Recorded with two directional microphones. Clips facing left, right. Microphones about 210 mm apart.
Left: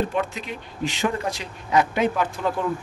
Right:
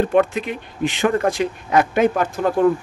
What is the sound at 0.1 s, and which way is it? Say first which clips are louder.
Speech: right 9 dB; 55° right (ahead or behind).